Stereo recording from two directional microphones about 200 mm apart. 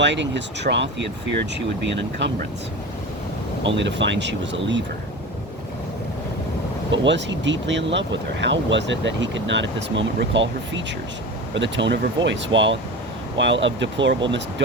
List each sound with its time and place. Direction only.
0.0 s speech: 60° right (ahead or behind)
3.6 s speech: 65° right (ahead or behind)
6.9 s speech: 65° right (ahead or behind)